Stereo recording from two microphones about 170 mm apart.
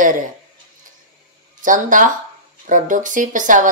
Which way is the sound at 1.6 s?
50° right (ahead or behind).